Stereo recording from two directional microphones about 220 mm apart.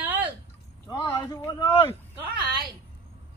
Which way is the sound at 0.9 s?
15° left (ahead or behind).